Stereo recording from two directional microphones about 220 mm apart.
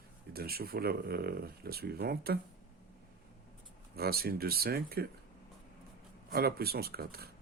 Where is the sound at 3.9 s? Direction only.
45° right (ahead or behind).